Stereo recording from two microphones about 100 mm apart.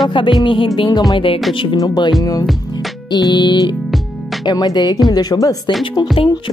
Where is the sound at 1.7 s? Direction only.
45° left (ahead or behind).